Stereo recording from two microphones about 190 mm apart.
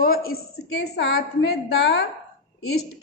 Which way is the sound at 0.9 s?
60° left (ahead or behind).